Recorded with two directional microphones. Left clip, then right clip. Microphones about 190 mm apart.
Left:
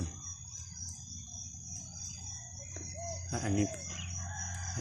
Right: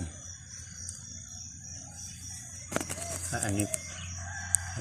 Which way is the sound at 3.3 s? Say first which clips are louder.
Right 2 dB; 15° left (ahead or behind).